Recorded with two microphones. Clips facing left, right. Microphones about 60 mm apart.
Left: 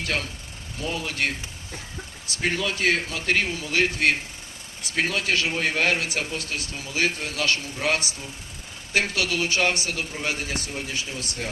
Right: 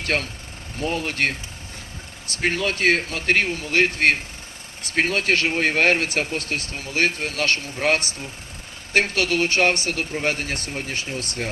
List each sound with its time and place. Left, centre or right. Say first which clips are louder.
0.0 s speech: right 4 dB; right